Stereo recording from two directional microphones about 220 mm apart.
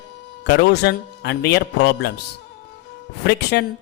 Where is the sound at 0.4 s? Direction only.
50° left (ahead or behind).